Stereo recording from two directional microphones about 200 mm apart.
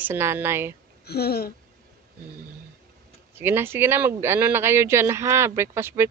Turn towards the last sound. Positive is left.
turn(degrees=-10)  # may be behind; listen again after turning